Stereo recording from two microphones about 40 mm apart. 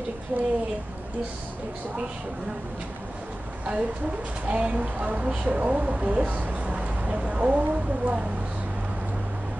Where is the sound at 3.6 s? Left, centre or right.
Right.